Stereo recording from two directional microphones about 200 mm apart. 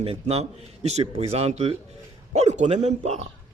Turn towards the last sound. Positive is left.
turn(degrees=-35)  # may be behind; listen again after turning